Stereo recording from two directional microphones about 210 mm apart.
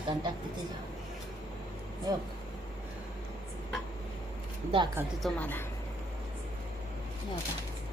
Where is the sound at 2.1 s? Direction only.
20° right (ahead or behind).